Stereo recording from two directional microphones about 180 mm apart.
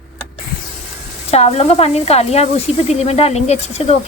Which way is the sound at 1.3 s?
35° left (ahead or behind).